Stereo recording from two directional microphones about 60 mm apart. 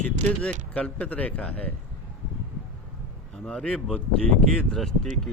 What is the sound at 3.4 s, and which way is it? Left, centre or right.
Speech, centre.